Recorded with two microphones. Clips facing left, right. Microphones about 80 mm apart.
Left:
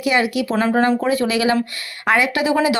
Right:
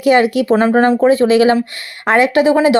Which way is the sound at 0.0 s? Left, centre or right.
Right.